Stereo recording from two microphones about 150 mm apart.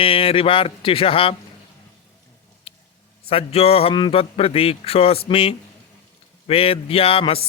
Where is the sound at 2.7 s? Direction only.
40° left (ahead or behind).